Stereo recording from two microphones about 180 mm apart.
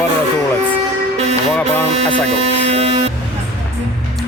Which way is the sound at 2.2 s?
35° right (ahead or behind).